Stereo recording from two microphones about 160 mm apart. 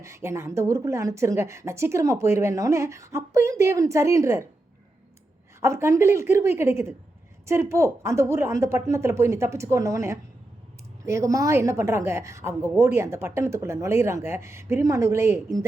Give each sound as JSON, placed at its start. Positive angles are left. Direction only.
{"t": 0.0, "sound": "a woman's voice", "side_deg": -15}
{"t": 5.5, "sound": "a woman's voice", "side_deg": -15}